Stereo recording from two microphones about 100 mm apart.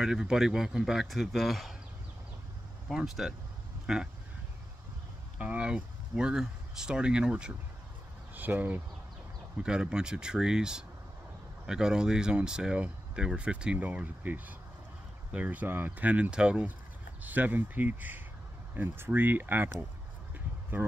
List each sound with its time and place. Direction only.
0.0 s speech: 5° right (ahead or behind)
2.9 s speech: 5° right (ahead or behind)
5.4 s speech: 10° right (ahead or behind)
20.7 s speech: 15° right (ahead or behind)